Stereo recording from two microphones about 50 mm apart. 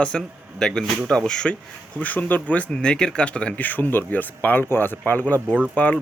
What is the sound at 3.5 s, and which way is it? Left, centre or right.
A man's voice, left.